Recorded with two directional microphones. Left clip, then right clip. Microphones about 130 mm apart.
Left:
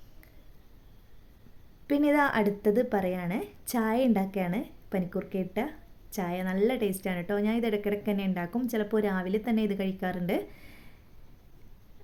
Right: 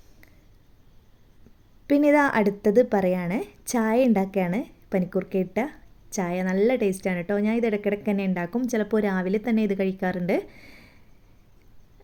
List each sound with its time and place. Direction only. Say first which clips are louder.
1.9 s a woman's voice: right 5 dB; 35° right (ahead or behind)